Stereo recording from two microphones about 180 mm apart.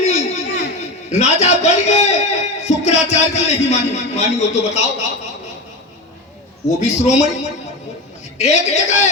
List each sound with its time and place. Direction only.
0.0 s a sound: 40° left (ahead or behind)
0.8 s a man's voice: 40° left (ahead or behind)
6.7 s a man's voice: 40° left (ahead or behind)
8.4 s a man's voice: 40° left (ahead or behind)